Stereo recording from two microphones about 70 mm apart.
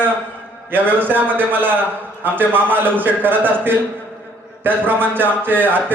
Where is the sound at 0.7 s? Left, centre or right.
Right.